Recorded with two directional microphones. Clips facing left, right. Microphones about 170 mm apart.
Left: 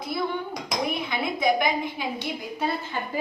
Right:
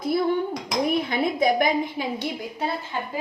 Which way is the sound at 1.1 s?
40° right (ahead or behind).